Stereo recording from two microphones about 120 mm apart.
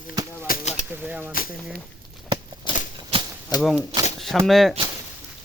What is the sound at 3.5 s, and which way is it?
Speech, 35° left (ahead or behind).